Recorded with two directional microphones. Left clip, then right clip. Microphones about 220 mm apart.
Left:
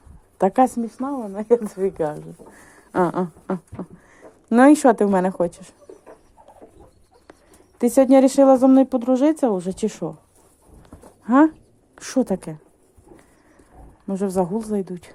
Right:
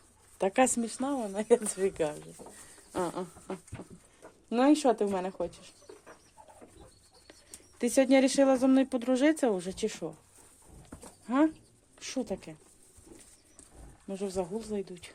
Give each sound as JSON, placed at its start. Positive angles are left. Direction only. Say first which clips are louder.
{"t": 0.3, "sound": "speech", "louder": "left 10 dB", "side_deg": 20}
{"t": 0.8, "sound": "a woman's voice", "louder": "left 6 dB", "side_deg": 0}
{"t": 2.9, "sound": "a woman's voice", "louder": "left 13 dB", "side_deg": 30}
{"t": 7.8, "sound": "speech", "louder": "left 10 dB", "side_deg": 20}
{"t": 11.3, "sound": "a woman's voice", "louder": "left 12 dB", "side_deg": 25}
{"t": 14.1, "sound": "speech", "louder": "left 12 dB", "side_deg": 30}